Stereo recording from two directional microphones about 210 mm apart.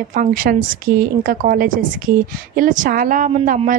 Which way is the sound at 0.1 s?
40° right (ahead or behind).